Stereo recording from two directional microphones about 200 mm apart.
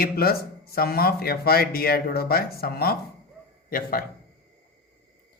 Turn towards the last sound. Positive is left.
turn(degrees=45)  # may be behind; listen again after turning